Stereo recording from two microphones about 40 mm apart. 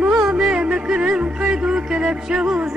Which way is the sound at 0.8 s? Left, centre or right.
Right.